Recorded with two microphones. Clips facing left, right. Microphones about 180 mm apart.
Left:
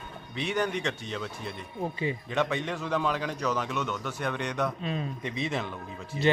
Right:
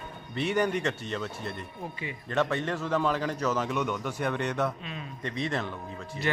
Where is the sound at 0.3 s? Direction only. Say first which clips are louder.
Right 2 dB; 10° right (ahead or behind).